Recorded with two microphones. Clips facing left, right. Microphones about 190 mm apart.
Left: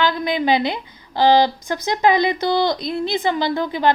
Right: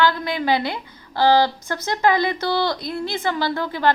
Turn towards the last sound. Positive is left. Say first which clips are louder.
# left 2 dB
turn(degrees=15)  # may be behind; listen again after turning